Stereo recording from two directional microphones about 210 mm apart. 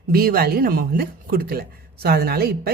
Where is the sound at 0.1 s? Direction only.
45° right (ahead or behind).